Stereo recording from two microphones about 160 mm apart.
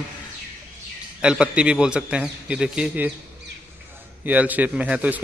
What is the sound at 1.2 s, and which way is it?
A man's voice, 5° right (ahead or behind).